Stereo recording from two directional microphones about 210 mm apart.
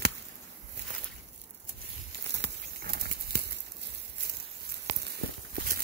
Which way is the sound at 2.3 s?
50° right (ahead or behind).